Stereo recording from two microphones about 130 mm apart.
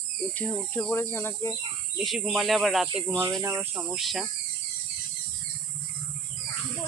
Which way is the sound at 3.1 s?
20° right (ahead or behind).